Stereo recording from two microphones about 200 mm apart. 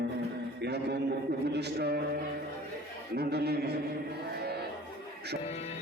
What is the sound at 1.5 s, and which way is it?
Speech, 55° right (ahead or behind).